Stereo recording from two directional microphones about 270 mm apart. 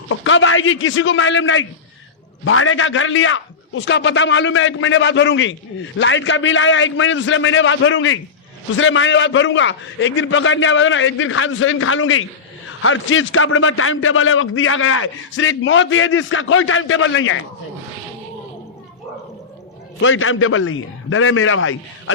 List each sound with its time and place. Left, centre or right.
0.1 s a man's voice: left
20.0 s a man's voice: left